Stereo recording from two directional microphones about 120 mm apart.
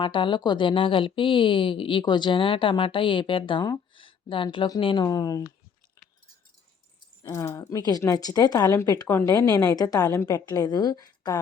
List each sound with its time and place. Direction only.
0.0 s a woman's voice: 45° left (ahead or behind)
4.4 s a woman's voice: 30° left (ahead or behind)
4.8 s a woman's voice: 45° left (ahead or behind)
5.0 s a woman's voice: 30° left (ahead or behind)
7.2 s a woman's voice: 30° left (ahead or behind)